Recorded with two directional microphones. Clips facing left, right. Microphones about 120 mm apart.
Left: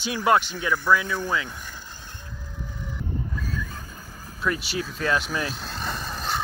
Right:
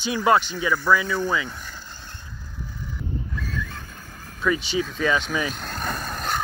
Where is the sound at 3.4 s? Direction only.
40° left (ahead or behind).